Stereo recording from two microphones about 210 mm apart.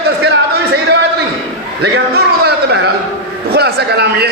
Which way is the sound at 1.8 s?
50° right (ahead or behind).